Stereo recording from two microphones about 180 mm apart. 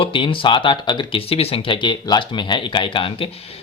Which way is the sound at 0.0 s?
30° left (ahead or behind).